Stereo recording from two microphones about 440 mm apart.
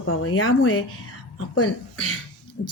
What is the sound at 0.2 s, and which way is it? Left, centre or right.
Speech, left.